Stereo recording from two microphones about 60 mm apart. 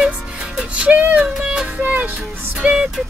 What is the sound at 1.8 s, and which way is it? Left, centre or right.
Music, right.